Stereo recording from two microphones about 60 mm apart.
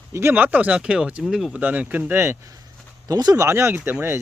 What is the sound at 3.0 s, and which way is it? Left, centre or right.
Speech, right.